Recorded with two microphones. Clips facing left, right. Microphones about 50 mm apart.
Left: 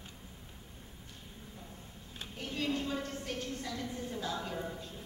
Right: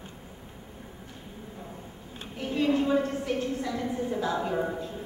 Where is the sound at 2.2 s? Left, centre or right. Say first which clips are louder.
Right 9 dB; right.